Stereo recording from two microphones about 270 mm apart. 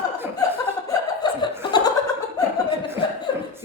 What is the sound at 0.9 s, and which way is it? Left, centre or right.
Chuckle, centre.